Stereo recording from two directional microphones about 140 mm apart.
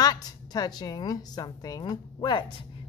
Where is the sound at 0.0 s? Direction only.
30° left (ahead or behind).